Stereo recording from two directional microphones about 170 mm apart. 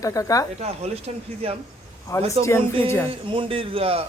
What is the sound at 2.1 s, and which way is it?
Speech, 15° left (ahead or behind).